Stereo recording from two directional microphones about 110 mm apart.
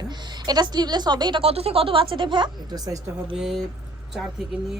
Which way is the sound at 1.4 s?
65° right (ahead or behind).